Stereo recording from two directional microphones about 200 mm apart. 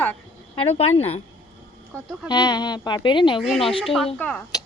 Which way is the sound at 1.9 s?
5° left (ahead or behind).